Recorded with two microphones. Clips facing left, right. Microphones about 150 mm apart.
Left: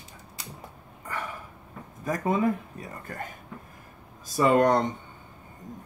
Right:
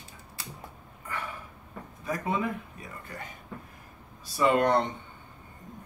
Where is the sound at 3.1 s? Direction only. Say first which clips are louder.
Left 5 dB; 45° left (ahead or behind).